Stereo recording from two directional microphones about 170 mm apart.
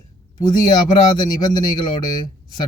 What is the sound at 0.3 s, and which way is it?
Speech, 20° left (ahead or behind).